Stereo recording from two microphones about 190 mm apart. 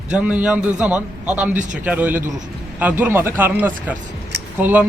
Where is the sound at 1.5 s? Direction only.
40° right (ahead or behind).